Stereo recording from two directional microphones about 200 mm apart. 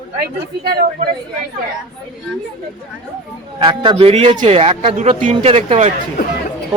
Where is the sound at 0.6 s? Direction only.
50° right (ahead or behind).